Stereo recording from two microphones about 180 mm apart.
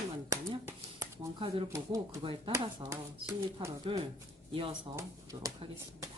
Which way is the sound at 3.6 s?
30° right (ahead or behind).